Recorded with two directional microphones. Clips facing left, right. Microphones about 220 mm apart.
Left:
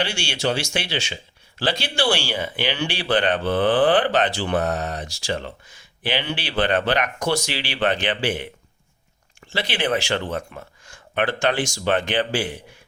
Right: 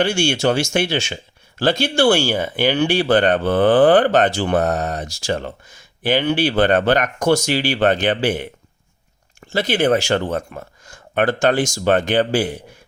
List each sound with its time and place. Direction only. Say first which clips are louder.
0.0 s speech: right 7 dB; 45° right (ahead or behind)
9.5 s speech: right 7 dB; 45° right (ahead or behind)